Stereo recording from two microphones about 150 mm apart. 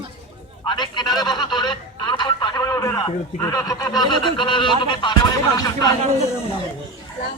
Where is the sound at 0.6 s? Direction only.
30° left (ahead or behind).